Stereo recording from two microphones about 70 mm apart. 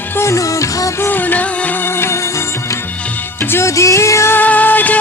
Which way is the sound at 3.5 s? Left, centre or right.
Left.